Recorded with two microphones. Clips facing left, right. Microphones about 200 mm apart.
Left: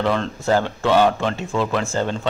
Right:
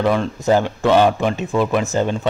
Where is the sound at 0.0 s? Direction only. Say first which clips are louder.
Right 3 dB; 10° right (ahead or behind).